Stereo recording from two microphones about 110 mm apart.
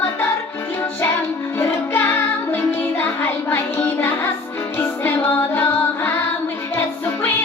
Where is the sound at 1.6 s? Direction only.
15° left (ahead or behind).